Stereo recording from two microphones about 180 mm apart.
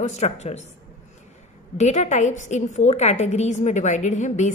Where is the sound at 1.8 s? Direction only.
40° left (ahead or behind).